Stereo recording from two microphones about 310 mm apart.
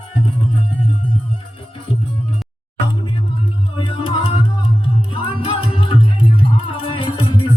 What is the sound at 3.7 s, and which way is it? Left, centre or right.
Music, centre.